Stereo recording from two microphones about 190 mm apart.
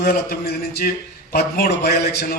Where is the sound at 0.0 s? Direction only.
55° left (ahead or behind).